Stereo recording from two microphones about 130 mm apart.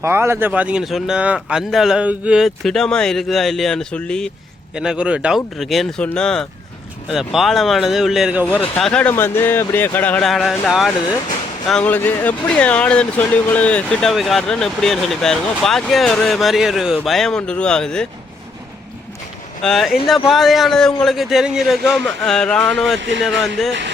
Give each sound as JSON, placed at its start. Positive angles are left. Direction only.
{"t": 0.0, "sound": "speech", "side_deg": -20}
{"t": 4.7, "sound": "speech", "side_deg": -5}
{"t": 8.5, "sound": "speech", "side_deg": 10}
{"t": 10.2, "sound": "speech", "side_deg": 0}
{"t": 11.7, "sound": "speech", "side_deg": 10}
{"t": 19.6, "sound": "speech", "side_deg": 0}